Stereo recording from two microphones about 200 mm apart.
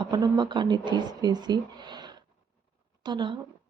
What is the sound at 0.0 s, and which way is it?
Speech, 20° right (ahead or behind).